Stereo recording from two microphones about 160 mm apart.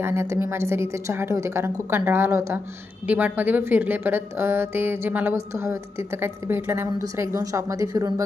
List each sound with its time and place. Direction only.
0.0 s speech: 15° right (ahead or behind)